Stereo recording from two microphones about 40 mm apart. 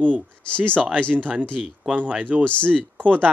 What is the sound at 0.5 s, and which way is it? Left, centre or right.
Speech, left.